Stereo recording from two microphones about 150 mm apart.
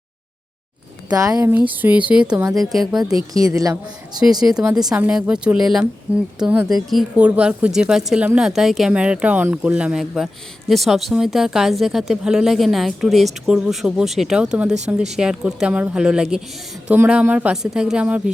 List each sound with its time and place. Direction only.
1.1 s speech: 25° right (ahead or behind)
1.5 s speech: 10° right (ahead or behind)
3.3 s speech: 20° right (ahead or behind)
4.2 s speech: 5° right (ahead or behind)